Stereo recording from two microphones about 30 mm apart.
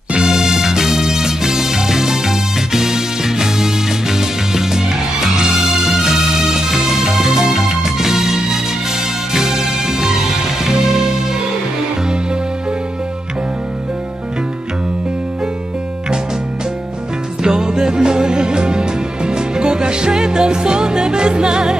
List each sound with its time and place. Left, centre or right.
0.2 s music: centre
5.2 s music: centre
17.4 s music: centre